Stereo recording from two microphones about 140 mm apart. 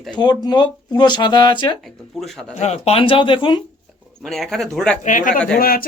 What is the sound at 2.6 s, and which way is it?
Speech, 50° left (ahead or behind).